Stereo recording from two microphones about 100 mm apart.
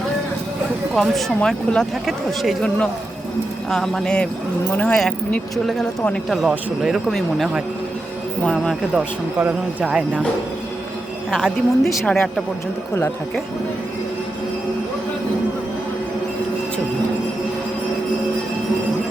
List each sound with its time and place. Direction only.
1.0 s speech: centre (ahead or behind)
2.6 s speech: 10° left (ahead or behind)
4.9 s speech: centre (ahead or behind)
9.4 s speech: 15° right (ahead or behind)
11.3 s speech: centre (ahead or behind)